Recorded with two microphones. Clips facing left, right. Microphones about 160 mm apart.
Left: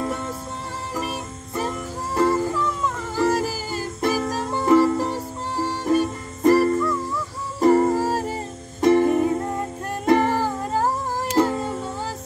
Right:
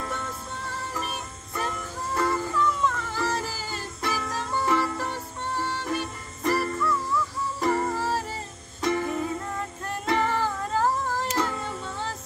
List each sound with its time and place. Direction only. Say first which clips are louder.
0.9 s music: left 5 dB; 15° left (ahead or behind)
2.1 s music: left 7 dB; 35° left (ahead or behind)
4.0 s music: left 7 dB; 40° left (ahead or behind)
10.8 s cat: even; 15° left (ahead or behind)
11.4 s music: left 7 dB; 35° left (ahead or behind)